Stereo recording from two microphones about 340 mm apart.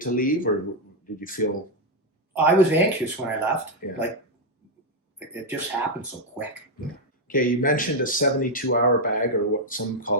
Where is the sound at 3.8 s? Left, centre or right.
Left.